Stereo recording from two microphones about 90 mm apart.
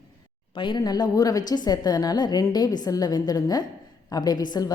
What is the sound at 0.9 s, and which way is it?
Speech, 45° left (ahead or behind).